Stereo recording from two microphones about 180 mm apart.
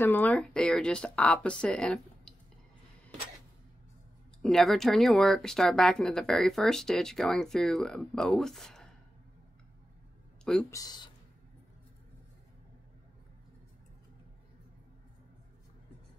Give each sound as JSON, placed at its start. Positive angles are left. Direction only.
{"t": 0.0, "sound": "speech", "side_deg": 10}
{"t": 4.4, "sound": "speech", "side_deg": 0}
{"t": 10.4, "sound": "speech", "side_deg": 5}
{"t": 10.7, "sound": "speech", "side_deg": 20}